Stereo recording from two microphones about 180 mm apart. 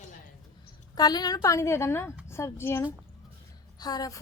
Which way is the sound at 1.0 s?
20° left (ahead or behind).